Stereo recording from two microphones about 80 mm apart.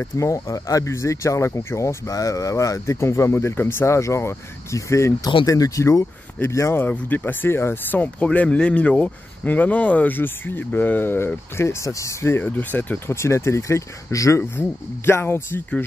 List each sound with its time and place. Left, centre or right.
0.2 s speech: left
12.4 s speech: left
13.1 s speech: left